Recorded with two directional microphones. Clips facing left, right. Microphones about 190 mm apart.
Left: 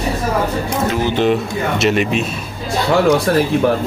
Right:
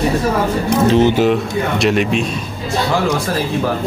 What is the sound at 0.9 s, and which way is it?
Speech, 25° right (ahead or behind).